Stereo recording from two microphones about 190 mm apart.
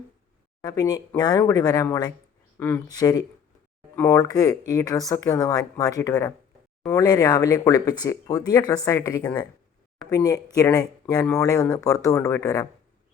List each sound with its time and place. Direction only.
0.6 s speech: 20° left (ahead or behind)